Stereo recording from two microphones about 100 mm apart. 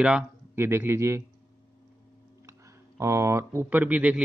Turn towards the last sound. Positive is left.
turn(degrees=-15)  # may be behind; listen again after turning